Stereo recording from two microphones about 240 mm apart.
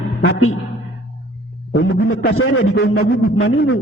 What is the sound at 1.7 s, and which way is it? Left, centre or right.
A man's voice, left.